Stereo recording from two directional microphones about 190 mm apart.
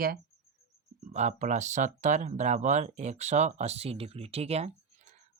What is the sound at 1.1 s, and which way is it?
Speech, 40° right (ahead or behind).